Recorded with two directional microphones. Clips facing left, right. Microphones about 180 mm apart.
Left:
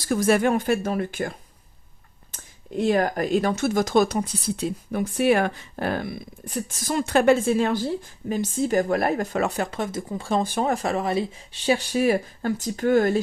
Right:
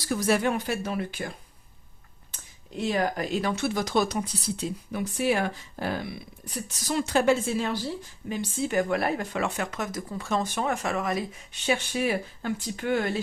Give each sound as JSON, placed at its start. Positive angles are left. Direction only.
{"t": 0.1, "sound": "speech", "side_deg": 50}
{"t": 2.3, "sound": "speech", "side_deg": 50}